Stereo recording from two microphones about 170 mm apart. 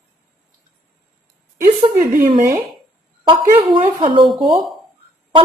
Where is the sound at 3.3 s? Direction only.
30° right (ahead or behind).